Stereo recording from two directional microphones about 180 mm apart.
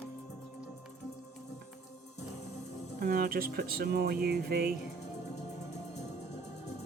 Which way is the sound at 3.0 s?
55° right (ahead or behind).